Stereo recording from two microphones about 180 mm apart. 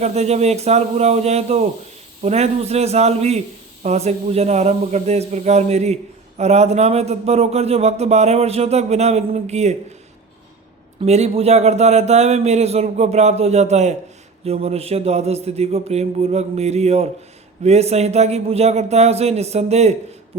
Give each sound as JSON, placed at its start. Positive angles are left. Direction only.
{"t": 0.0, "sound": "a man's voice", "side_deg": -35}
{"t": 11.0, "sound": "a man's voice", "side_deg": -35}